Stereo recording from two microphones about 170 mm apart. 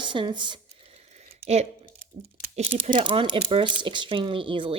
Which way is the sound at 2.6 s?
35° right (ahead or behind).